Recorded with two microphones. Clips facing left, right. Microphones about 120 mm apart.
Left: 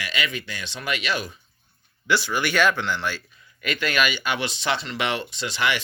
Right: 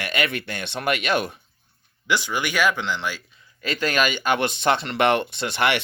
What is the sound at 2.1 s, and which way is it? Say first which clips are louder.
Speech: left 1 dB; 20° right (ahead or behind).